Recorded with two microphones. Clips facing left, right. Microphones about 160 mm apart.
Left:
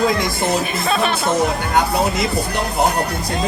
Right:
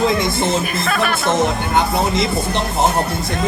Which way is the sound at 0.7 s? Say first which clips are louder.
Even; 20° left (ahead or behind).